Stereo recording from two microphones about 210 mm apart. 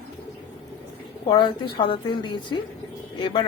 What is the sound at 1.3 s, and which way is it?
A woman's voice, 20° left (ahead or behind).